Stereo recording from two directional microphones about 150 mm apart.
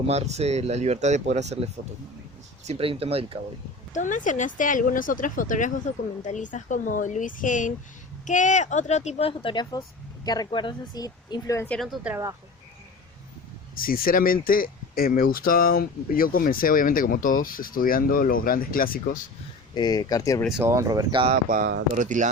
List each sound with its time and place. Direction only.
0.1 s speech: 45° right (ahead or behind)
3.9 s a woman's voice: 55° left (ahead or behind); by 11.8 s 15° left (ahead or behind)
11.8 s speech: centre (ahead or behind)
13.7 s speech: 75° left (ahead or behind)
19.7 s a woman's voice: 25° left (ahead or behind)
20.6 s speech: 20° right (ahead or behind)
21.5 s speech: 70° right (ahead or behind)